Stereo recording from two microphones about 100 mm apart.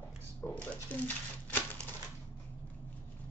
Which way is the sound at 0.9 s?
15° left (ahead or behind).